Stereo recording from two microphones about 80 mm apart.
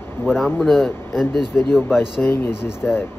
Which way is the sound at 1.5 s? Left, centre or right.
Left.